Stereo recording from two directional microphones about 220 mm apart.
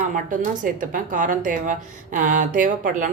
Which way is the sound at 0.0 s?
35° right (ahead or behind).